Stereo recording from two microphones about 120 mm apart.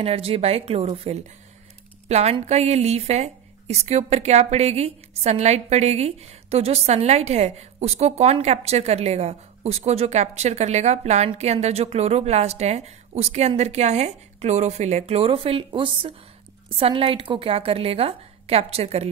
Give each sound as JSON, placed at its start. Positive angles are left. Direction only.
{"t": 0.0, "sound": "a woman's voice", "side_deg": -55}